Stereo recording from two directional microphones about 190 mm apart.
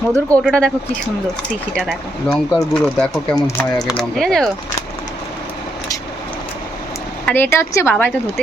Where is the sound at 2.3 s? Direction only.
10° left (ahead or behind).